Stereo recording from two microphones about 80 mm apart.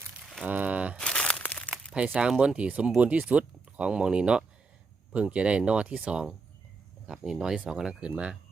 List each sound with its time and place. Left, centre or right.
0.4 s a sound: right
0.9 s crumpling: centre
2.0 s speech: centre